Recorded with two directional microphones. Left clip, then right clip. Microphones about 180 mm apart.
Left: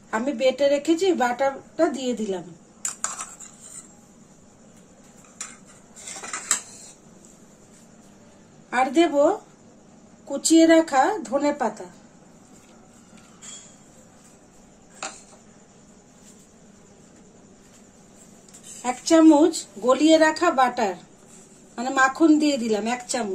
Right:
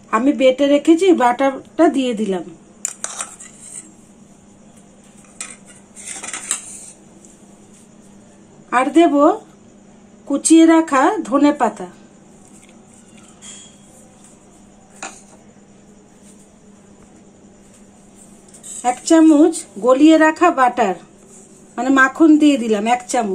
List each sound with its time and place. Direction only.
0.1 s speech: 40° right (ahead or behind)
8.6 s speech: 40° right (ahead or behind)
10.6 s speech: 40° right (ahead or behind)
19.0 s speech: 35° right (ahead or behind)